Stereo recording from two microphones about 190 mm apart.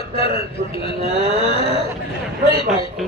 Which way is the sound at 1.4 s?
30° left (ahead or behind).